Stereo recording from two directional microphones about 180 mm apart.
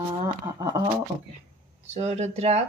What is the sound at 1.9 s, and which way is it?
Speech, 40° right (ahead or behind).